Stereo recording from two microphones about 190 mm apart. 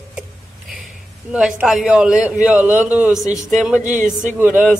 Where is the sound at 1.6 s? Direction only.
5° right (ahead or behind).